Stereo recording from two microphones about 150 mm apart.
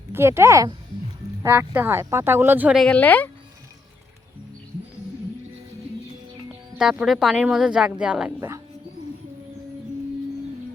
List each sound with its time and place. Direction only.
0.1 s speech: 15° right (ahead or behind)
2.8 s a woman's voice: 10° left (ahead or behind)
6.7 s a woman's voice: 5° right (ahead or behind)
8.4 s speech: 20° right (ahead or behind)